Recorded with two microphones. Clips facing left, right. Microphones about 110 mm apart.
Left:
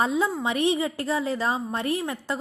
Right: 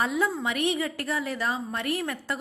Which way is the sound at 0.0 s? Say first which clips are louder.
Left 2 dB; 25° left (ahead or behind).